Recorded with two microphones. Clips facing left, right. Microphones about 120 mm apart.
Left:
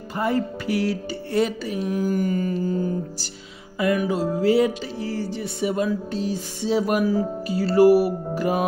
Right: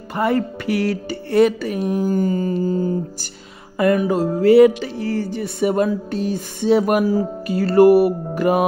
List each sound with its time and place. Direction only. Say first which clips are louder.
0.1 s music: right 4 dB; 65° right (ahead or behind)
2.0 s mantra: right 4 dB; 30° right (ahead or behind)
3.7 s music: right 5 dB; 50° right (ahead or behind)